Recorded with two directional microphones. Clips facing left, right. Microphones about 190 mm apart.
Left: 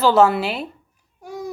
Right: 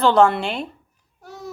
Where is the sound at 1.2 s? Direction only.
10° left (ahead or behind).